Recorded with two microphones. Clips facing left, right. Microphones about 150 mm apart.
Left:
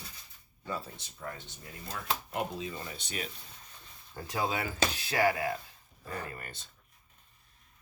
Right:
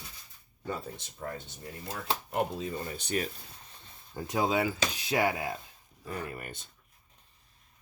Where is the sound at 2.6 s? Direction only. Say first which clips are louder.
Right 4 dB; 40° right (ahead or behind).